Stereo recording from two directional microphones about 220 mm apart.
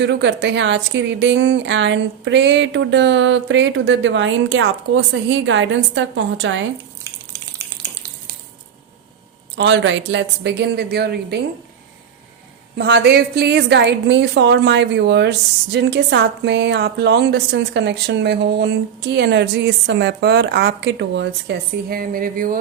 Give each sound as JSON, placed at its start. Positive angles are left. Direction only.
{"t": 0.0, "sound": "a woman's voice", "side_deg": -55}
{"t": 9.6, "sound": "a woman's voice", "side_deg": -55}
{"t": 12.7, "sound": "a woman's voice", "side_deg": -50}